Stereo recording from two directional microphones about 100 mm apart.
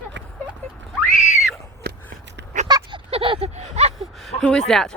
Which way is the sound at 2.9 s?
60° right (ahead or behind).